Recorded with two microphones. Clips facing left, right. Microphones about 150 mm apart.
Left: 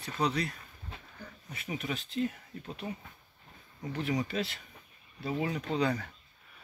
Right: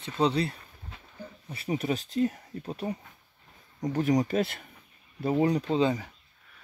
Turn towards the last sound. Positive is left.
turn(degrees=-15)  # may be behind; listen again after turning